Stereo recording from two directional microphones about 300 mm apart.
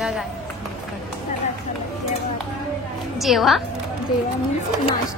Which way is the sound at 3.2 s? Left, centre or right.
Centre.